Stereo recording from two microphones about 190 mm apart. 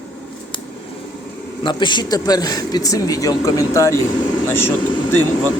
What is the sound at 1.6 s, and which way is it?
Speech, 25° left (ahead or behind).